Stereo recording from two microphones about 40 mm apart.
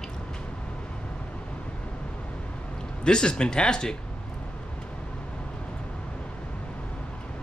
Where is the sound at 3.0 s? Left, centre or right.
Left.